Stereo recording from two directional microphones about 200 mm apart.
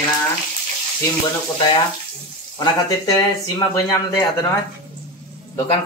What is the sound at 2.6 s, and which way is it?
Speech, 20° left (ahead or behind).